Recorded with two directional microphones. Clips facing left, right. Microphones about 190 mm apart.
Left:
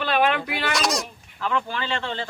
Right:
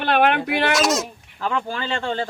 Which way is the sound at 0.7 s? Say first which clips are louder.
Right 3 dB; centre (ahead or behind).